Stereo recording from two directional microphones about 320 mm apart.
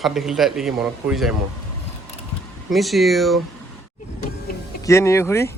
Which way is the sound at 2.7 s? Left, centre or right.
Centre.